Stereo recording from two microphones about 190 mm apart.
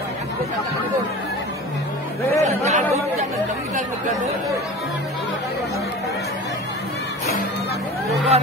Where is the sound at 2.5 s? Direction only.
35° right (ahead or behind).